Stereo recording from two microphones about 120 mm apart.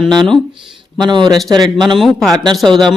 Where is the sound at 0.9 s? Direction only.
40° right (ahead or behind).